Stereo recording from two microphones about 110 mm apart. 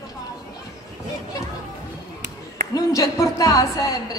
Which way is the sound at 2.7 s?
30° left (ahead or behind).